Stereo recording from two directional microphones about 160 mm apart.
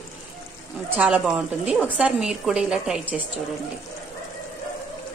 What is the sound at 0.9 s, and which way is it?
A woman's voice, 10° right (ahead or behind).